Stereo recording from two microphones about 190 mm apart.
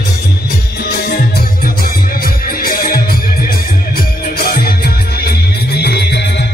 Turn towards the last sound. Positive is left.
turn(degrees=60)  # may be behind; listen again after turning